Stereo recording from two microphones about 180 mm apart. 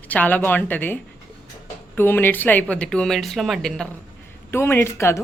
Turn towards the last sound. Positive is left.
turn(degrees=15)  # may be behind; listen again after turning